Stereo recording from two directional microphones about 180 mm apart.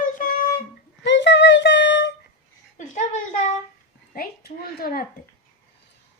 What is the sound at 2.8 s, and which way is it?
Speech, 40° left (ahead or behind).